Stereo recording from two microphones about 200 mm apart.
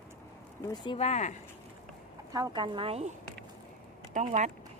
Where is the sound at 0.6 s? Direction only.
20° left (ahead or behind).